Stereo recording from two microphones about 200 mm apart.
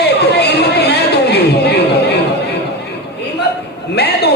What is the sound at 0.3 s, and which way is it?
Chatter, 55° left (ahead or behind).